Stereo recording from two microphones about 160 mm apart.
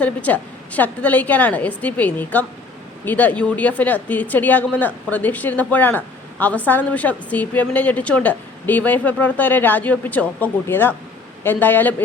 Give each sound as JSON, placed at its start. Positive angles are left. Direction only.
{"t": 0.0, "sound": "a woman's voice", "side_deg": 10}